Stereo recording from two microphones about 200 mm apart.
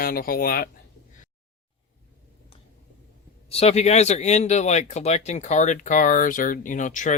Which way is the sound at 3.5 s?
30° left (ahead or behind).